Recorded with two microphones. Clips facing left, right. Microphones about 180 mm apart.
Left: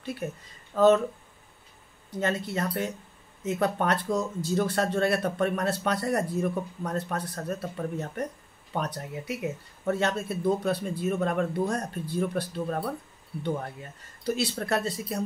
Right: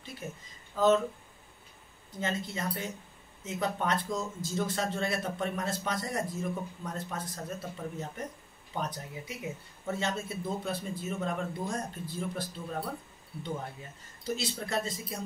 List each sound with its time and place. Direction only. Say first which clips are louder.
0.0 s speech: left 8 dB; 65° left (ahead or behind)
2.0 s speech: left 6 dB; 65° left (ahead or behind)
14.2 s speech: left 6 dB; 65° left (ahead or behind)